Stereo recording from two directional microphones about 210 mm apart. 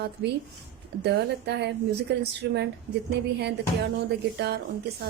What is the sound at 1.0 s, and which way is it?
A woman's voice, 50° right (ahead or behind).